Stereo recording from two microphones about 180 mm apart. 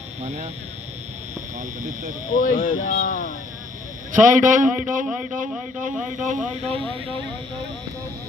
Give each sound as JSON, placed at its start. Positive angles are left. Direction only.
{"t": 0.2, "sound": "speech", "side_deg": -40}
{"t": 1.8, "sound": "a man's voice", "side_deg": -45}
{"t": 2.3, "sound": "speech", "side_deg": 50}
{"t": 4.1, "sound": "a man's voice", "side_deg": -45}